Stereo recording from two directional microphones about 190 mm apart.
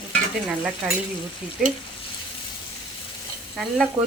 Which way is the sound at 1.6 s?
Centre (ahead or behind).